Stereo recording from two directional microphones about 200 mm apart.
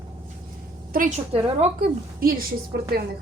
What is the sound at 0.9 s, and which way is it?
A woman's voice, 40° right (ahead or behind).